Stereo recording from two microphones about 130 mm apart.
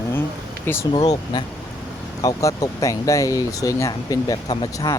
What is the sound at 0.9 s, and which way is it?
Speech, 35° left (ahead or behind).